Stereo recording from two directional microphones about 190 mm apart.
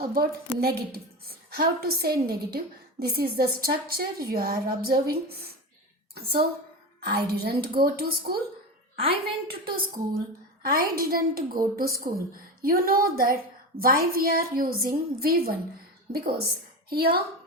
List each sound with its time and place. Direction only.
0.0 s a woman's voice: 55° right (ahead or behind)
7.0 s a woman's voice: 55° right (ahead or behind)